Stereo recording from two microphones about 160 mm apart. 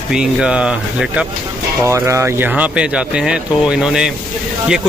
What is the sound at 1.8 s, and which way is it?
Speech, 15° right (ahead or behind).